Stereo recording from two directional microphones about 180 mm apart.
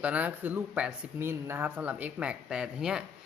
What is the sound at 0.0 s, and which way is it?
Speech, 5° right (ahead or behind).